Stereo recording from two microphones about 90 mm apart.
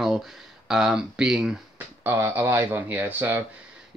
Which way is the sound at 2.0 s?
25° right (ahead or behind).